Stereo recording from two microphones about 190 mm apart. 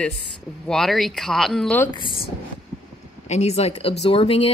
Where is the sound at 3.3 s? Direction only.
35° left (ahead or behind).